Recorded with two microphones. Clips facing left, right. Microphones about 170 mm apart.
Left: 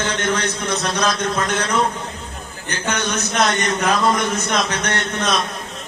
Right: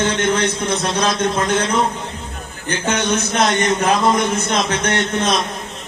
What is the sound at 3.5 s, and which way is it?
A man's voice, 25° right (ahead or behind).